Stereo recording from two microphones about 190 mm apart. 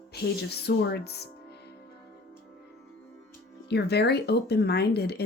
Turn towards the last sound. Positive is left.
turn(degrees=55)  # may be behind; listen again after turning